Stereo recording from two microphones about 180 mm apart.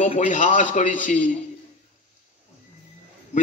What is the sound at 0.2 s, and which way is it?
A man's voice, 45° left (ahead or behind).